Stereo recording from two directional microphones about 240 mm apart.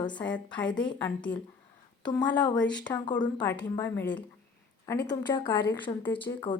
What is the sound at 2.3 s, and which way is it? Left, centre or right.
A woman's voice, centre.